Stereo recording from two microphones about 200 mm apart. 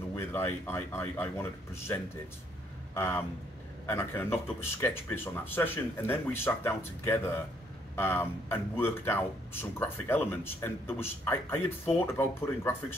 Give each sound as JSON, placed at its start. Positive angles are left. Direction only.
{"t": 0.1, "sound": "speech", "side_deg": 15}